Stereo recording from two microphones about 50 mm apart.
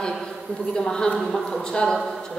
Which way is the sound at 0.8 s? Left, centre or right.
Centre.